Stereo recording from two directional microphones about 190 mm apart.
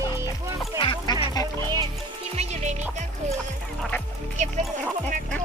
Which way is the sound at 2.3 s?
35° right (ahead or behind).